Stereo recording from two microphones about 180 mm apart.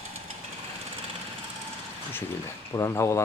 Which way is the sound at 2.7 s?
15° left (ahead or behind).